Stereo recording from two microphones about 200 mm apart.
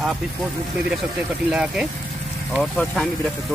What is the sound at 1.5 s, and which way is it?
Speech, 5° right (ahead or behind).